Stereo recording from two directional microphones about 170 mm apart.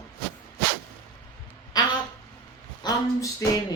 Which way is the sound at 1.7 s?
25° left (ahead or behind).